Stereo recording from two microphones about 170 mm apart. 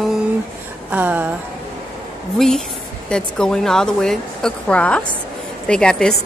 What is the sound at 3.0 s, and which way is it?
Speech, 5° left (ahead or behind).